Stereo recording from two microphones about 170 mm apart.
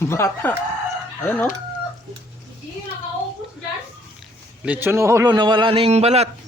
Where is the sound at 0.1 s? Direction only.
15° left (ahead or behind).